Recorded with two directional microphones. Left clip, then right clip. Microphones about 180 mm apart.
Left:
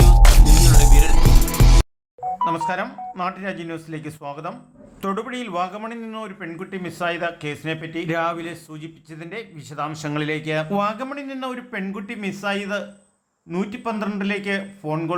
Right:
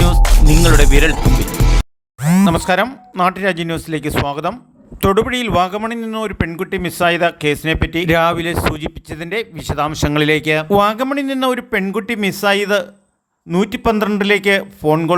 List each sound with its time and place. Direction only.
0.2 s music: centre (ahead or behind)
2.4 s speech: 45° right (ahead or behind)